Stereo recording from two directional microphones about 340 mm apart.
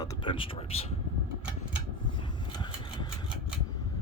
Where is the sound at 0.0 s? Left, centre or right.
Centre.